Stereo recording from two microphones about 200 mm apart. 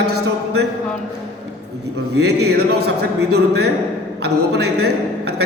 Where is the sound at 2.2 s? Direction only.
55° right (ahead or behind).